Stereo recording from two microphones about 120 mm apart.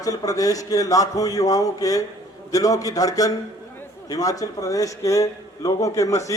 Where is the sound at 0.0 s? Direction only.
30° left (ahead or behind).